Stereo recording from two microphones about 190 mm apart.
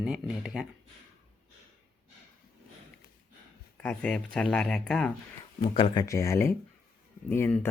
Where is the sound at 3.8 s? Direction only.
5° left (ahead or behind).